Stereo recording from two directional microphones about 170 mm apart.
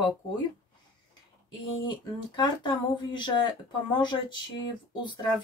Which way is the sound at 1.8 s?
25° left (ahead or behind).